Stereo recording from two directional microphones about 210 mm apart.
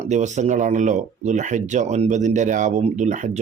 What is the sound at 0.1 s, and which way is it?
Speech, 35° right (ahead or behind).